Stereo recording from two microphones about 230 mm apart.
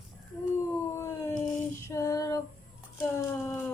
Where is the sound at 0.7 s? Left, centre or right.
Centre.